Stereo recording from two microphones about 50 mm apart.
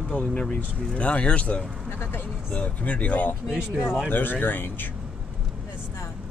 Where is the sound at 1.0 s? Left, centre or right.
Left.